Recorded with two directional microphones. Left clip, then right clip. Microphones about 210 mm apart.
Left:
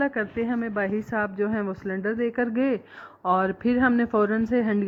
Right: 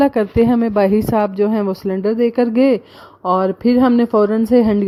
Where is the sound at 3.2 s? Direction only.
35° right (ahead or behind).